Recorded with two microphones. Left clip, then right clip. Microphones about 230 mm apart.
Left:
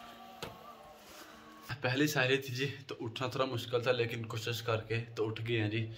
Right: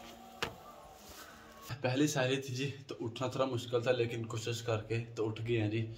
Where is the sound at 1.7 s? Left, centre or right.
Centre.